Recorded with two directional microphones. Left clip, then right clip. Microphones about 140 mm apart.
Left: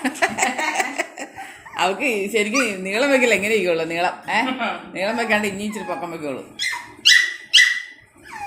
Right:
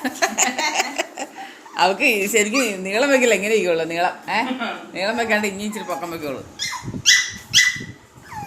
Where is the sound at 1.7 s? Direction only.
20° right (ahead or behind); by 6.4 s 10° left (ahead or behind).